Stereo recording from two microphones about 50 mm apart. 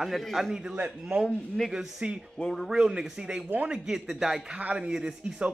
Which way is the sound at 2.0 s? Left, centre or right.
Right.